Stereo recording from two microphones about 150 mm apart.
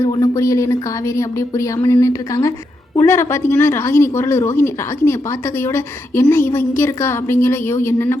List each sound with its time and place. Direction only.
0.0 s speech: 20° left (ahead or behind)